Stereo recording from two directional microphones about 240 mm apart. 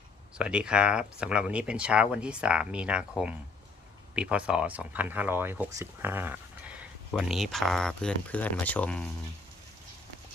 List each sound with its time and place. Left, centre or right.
0.3 s speech: centre